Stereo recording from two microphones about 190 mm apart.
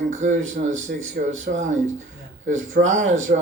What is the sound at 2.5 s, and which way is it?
Speech, 90° right.